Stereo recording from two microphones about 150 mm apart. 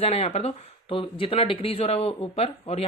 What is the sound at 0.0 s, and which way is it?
Speech, 40° left (ahead or behind).